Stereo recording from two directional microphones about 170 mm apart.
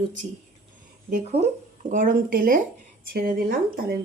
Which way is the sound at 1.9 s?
55° right (ahead or behind).